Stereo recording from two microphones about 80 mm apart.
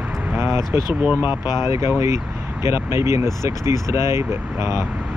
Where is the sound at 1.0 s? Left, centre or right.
Right.